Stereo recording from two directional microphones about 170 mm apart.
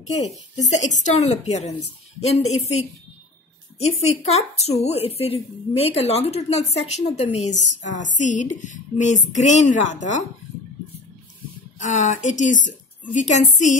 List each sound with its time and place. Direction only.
0.6 s a woman's voice: 45° left (ahead or behind)
11.8 s a woman's voice: 45° left (ahead or behind)